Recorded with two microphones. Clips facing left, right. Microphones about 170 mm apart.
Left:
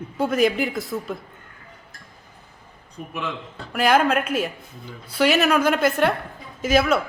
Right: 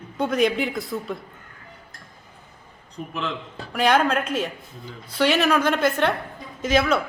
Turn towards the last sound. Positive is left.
turn(degrees=5)  # may be behind; listen again after turning